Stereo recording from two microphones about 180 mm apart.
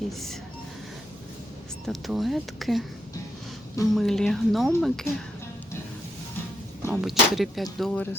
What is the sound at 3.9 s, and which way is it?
Speech, centre (ahead or behind).